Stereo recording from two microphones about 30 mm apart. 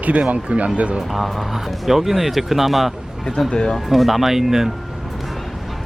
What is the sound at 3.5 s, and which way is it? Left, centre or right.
Speech, centre.